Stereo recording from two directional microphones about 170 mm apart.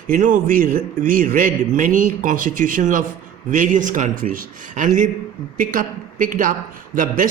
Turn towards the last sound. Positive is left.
turn(degrees=-55)  # may be behind; listen again after turning